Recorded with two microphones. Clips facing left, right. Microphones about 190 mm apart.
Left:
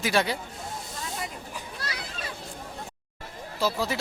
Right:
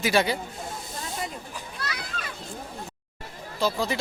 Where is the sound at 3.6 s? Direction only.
5° left (ahead or behind).